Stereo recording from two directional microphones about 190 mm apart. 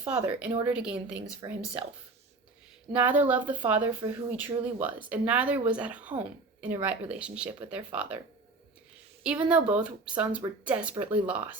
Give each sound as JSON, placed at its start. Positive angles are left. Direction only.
{"t": 0.0, "sound": "speech", "side_deg": -5}
{"t": 1.4, "sound": "speech", "side_deg": -20}
{"t": 2.9, "sound": "speech", "side_deg": -10}
{"t": 9.2, "sound": "speech", "side_deg": -5}